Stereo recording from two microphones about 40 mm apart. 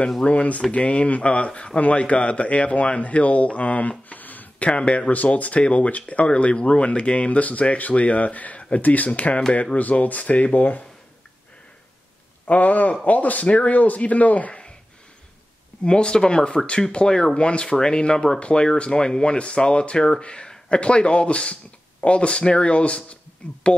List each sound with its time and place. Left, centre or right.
0.2 s speech: left
4.1 s a sound: left
4.6 s speech: left
5.1 s speech: left
9.8 s speech: left
12.4 s speech: left
15.8 s speech: left